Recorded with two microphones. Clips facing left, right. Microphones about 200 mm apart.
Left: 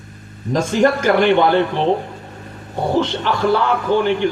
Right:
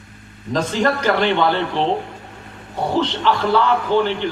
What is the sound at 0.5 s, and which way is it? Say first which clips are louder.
A man's voice: left 4 dB; 50° left (ahead or behind).